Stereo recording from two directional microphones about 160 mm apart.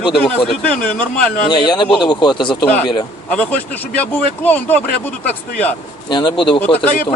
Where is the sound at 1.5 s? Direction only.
30° left (ahead or behind).